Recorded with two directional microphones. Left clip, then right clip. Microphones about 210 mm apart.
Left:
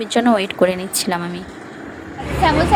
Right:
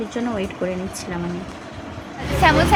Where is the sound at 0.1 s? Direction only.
45° left (ahead or behind).